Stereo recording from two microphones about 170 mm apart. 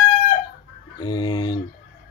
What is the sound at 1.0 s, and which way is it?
Speech, 25° left (ahead or behind).